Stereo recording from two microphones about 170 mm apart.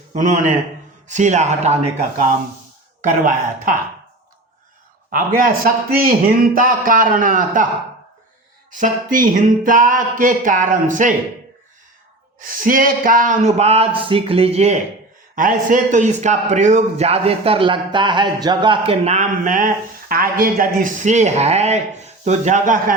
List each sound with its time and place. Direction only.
0.1 s a man's voice: 45° right (ahead or behind)
3.1 s a man's voice: 50° right (ahead or behind)
5.1 s a man's voice: 55° right (ahead or behind)
8.7 s a man's voice: 50° right (ahead or behind)
12.4 s speech: 55° right (ahead or behind); by 14.8 s 40° right (ahead or behind)
15.4 s a man's voice: 50° right (ahead or behind)